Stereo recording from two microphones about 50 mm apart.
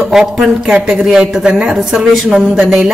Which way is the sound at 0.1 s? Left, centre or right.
Centre.